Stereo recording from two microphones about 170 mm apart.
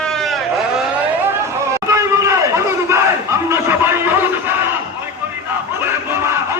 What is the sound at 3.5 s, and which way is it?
Music, 15° right (ahead or behind).